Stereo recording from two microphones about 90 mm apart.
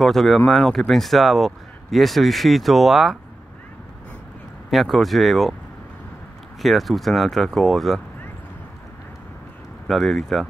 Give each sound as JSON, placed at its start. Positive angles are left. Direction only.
{"t": 0.0, "sound": "speech", "side_deg": 0}
{"t": 4.6, "sound": "speech", "side_deg": 0}
{"t": 6.6, "sound": "speech", "side_deg": 0}
{"t": 9.8, "sound": "speech", "side_deg": 0}